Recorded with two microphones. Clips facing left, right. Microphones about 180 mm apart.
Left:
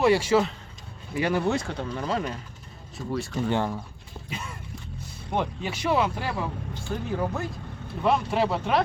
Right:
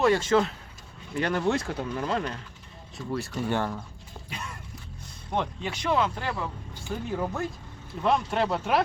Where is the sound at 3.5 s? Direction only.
15° left (ahead or behind).